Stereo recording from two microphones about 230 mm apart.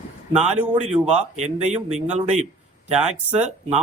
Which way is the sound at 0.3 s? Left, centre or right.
Right.